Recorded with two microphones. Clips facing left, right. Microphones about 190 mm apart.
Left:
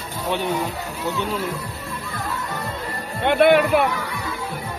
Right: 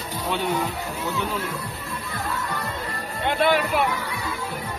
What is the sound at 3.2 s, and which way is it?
Speech, 60° left (ahead or behind).